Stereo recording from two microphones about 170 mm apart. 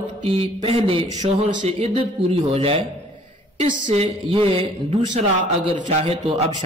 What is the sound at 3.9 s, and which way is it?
Speech, 35° right (ahead or behind).